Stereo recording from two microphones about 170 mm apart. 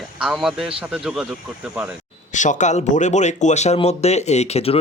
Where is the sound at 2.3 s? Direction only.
45° left (ahead or behind).